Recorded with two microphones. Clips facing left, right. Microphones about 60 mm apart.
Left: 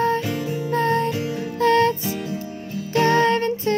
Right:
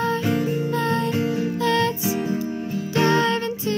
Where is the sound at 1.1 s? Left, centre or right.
Right.